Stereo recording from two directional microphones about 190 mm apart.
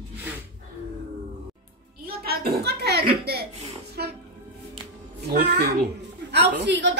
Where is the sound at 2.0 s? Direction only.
55° right (ahead or behind).